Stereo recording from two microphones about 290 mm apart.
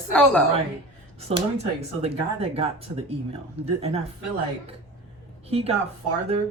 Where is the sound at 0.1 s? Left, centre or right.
Centre.